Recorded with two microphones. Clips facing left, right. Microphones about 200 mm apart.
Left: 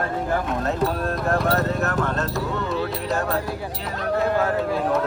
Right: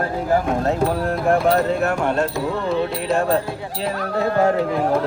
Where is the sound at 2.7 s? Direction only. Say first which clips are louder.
Right 4 dB; 25° right (ahead or behind).